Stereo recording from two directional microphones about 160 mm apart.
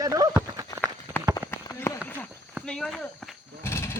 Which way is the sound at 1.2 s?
15° left (ahead or behind).